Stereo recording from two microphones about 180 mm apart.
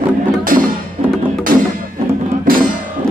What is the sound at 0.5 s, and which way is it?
Music, 50° right (ahead or behind).